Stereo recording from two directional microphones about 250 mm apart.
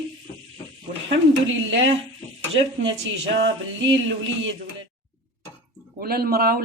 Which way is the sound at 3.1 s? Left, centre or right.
Right.